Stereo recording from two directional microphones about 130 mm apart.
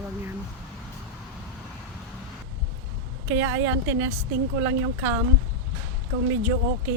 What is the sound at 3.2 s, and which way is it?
A woman's voice, 15° right (ahead or behind).